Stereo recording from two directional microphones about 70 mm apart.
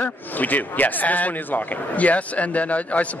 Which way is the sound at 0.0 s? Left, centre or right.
Left.